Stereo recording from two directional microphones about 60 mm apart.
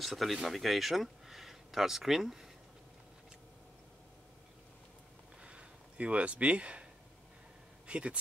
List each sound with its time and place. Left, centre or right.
0.0 s speech: centre
5.4 s a sound: centre
7.8 s speech: centre